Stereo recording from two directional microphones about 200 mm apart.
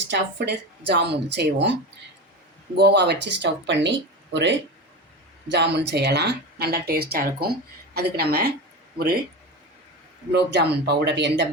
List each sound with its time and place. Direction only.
0.1 s speech: 55° right (ahead or behind)
2.7 s speech: 55° right (ahead or behind)
10.3 s speech: 55° right (ahead or behind)